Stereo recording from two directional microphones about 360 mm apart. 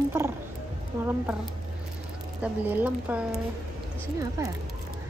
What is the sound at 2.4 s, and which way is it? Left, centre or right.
A woman's voice, centre.